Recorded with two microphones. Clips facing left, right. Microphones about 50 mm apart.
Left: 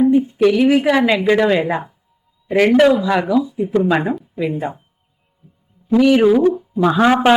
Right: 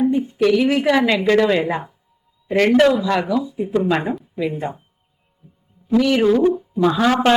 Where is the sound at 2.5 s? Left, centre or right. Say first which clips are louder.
Left 2 dB; centre.